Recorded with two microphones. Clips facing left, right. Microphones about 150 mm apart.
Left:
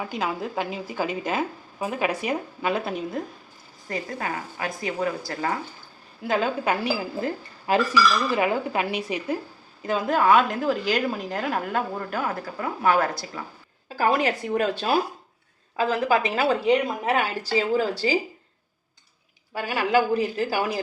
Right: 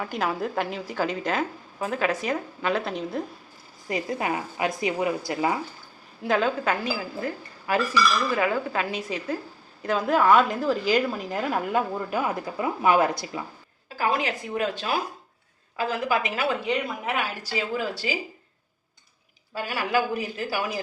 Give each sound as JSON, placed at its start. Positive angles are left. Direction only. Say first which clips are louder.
{"t": 0.0, "sound": "a woman's voice", "louder": "right 1 dB", "side_deg": 5}
{"t": 3.8, "sound": "speech", "louder": "right 3 dB", "side_deg": -15}
{"t": 6.2, "sound": "a woman's voice", "louder": "right 1 dB", "side_deg": 0}
{"t": 6.7, "sound": "a woman's voice", "louder": "left 2 dB", "side_deg": 20}
{"t": 9.8, "sound": "a woman's voice", "louder": "even", "side_deg": 0}
{"t": 14.0, "sound": "speech", "louder": "left 4 dB", "side_deg": 40}
{"t": 19.6, "sound": "speech", "louder": "left 4 dB", "side_deg": 25}